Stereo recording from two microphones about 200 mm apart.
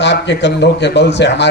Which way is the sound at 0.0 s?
60° left (ahead or behind).